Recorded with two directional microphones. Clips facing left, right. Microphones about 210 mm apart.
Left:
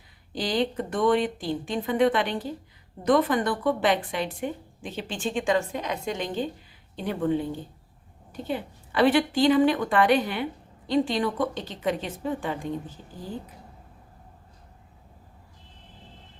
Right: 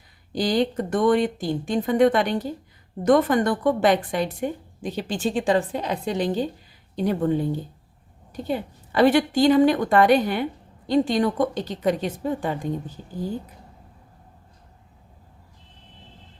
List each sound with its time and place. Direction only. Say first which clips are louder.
0.3 s a woman's voice: right 4 dB; 45° right (ahead or behind)